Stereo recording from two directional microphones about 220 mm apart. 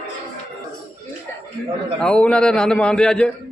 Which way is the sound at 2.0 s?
5° left (ahead or behind).